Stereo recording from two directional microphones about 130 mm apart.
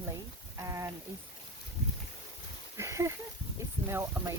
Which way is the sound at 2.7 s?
20° right (ahead or behind).